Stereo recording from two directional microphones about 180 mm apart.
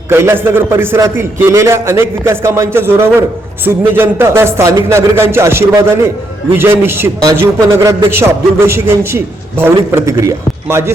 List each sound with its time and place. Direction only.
0.1 s a man's voice: 15° right (ahead or behind)